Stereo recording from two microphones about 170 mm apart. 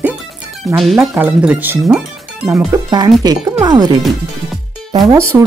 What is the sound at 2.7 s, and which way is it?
Speech, 25° right (ahead or behind).